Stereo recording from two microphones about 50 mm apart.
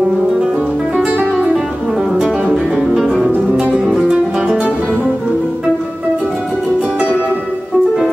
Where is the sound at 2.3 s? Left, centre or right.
Centre.